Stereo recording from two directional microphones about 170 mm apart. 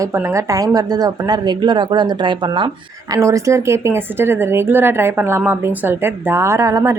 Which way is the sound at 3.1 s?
15° right (ahead or behind).